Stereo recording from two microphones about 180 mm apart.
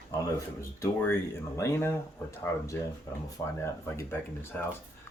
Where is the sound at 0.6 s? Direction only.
15° left (ahead or behind).